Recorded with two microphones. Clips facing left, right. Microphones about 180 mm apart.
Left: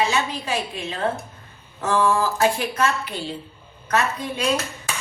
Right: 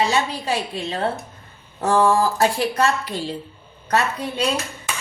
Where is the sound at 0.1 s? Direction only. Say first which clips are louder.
Right 2 dB; 35° right (ahead or behind).